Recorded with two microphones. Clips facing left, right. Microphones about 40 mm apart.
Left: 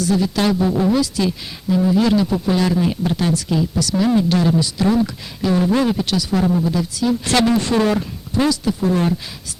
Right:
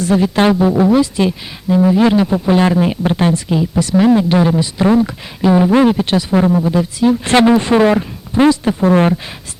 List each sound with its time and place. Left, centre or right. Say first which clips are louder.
0.0 s speech: right 5 dB; right